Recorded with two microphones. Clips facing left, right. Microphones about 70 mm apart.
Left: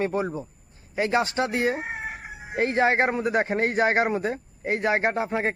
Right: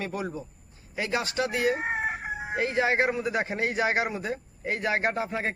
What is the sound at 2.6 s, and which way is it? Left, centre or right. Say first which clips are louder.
A man's voice: left 4 dB; left.